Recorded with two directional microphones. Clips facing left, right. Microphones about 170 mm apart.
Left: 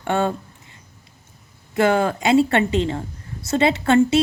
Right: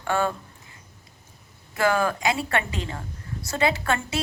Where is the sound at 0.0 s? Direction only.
25° left (ahead or behind).